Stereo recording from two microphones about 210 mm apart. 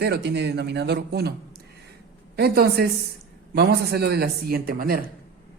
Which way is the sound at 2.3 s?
50° right (ahead or behind).